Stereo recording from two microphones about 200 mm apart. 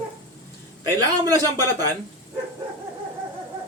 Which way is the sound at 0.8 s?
20° right (ahead or behind).